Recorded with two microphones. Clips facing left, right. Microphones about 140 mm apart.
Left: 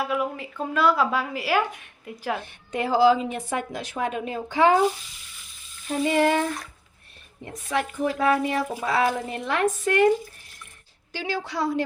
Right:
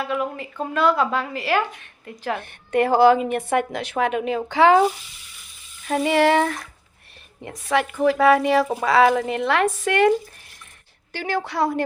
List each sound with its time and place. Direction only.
0.0 s a woman's voice: 5° left (ahead or behind)
2.4 s a woman's voice: 60° right (ahead or behind); by 4.8 s 85° right
5.9 s speech: 80° right
11.1 s a woman's voice: 55° right (ahead or behind)